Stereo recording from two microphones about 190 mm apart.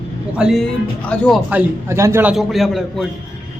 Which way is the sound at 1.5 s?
10° right (ahead or behind).